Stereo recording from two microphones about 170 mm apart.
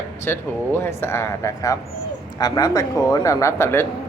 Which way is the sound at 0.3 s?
10° left (ahead or behind).